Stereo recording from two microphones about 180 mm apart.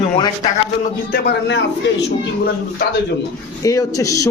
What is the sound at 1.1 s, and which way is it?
Speech, 70° left (ahead or behind).